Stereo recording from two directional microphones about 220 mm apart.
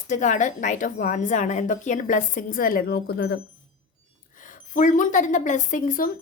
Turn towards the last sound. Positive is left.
turn(degrees=40)  # may be behind; listen again after turning